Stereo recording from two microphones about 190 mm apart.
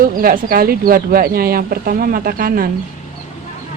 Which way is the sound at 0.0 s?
50° right (ahead or behind).